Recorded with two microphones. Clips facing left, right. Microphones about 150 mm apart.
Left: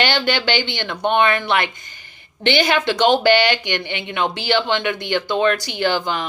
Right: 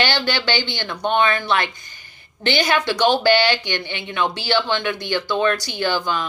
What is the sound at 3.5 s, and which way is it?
Speech, 55° left (ahead or behind).